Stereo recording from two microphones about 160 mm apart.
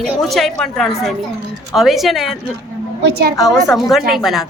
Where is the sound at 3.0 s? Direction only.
90° right.